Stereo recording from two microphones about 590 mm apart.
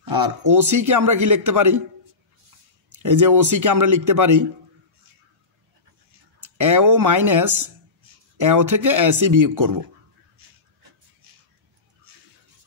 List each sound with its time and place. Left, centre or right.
0.1 s a man's voice: right
3.0 s a man's voice: right
6.4 s a man's voice: right